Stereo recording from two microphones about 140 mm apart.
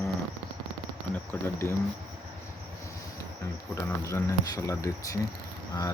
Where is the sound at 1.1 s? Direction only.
15° left (ahead or behind).